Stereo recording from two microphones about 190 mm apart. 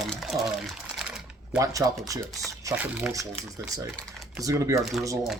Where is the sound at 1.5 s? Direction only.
20° right (ahead or behind).